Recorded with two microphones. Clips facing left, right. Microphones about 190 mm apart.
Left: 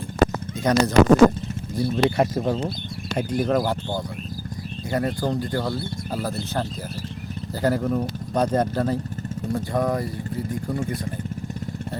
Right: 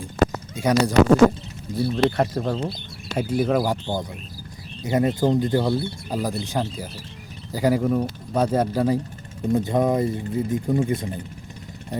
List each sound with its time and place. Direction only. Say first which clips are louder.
0.6 s speech: even; 10° right (ahead or behind); by 2.7 s 5° left (ahead or behind)
3.2 s speech: right 1 dB; 5° right (ahead or behind)